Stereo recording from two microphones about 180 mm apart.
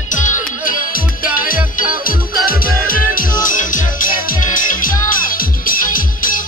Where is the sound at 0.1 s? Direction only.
45° left (ahead or behind).